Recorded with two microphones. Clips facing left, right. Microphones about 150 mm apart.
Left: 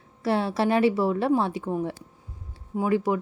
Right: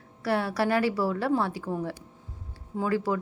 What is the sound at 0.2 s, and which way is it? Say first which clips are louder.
A woman's voice: left 2 dB; 25° left (ahead or behind).